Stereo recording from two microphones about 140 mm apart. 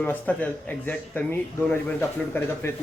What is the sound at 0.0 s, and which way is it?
Speech, 10° left (ahead or behind).